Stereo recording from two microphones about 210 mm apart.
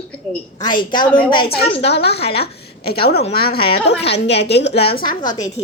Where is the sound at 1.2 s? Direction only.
25° left (ahead or behind).